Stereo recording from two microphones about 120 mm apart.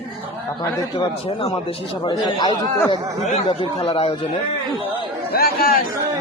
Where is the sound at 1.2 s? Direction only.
55° left (ahead or behind).